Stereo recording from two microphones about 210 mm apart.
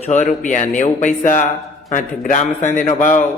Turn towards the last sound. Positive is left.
turn(degrees=40)  # may be behind; listen again after turning